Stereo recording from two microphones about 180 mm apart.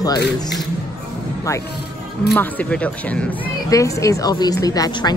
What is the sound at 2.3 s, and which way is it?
Speech, 10° left (ahead or behind).